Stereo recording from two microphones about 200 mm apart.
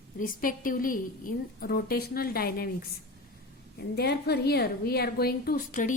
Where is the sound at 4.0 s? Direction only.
55° left (ahead or behind).